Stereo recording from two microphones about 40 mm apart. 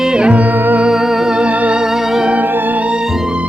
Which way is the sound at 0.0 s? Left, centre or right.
Centre.